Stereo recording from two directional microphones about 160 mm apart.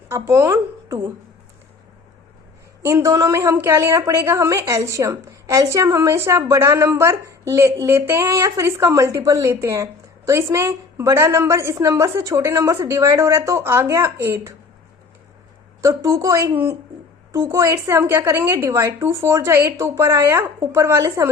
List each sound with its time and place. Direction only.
0.1 s speech: 20° right (ahead or behind)
2.8 s a woman's voice: 20° right (ahead or behind)
15.8 s a woman's voice: 20° right (ahead or behind)